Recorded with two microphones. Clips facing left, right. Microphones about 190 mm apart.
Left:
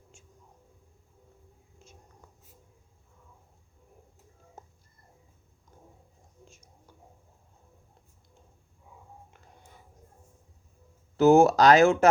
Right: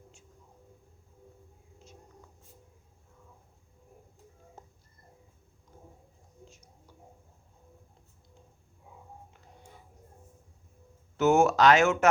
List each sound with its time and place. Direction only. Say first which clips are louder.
11.2 s speech: left 4 dB; 35° left (ahead or behind)